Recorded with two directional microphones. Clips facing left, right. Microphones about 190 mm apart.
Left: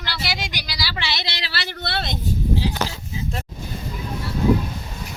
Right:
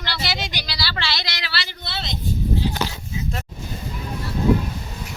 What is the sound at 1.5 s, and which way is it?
Speech, 60° left (ahead or behind).